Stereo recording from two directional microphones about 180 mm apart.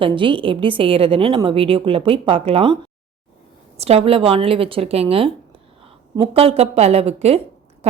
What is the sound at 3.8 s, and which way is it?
A woman's voice, 35° right (ahead or behind).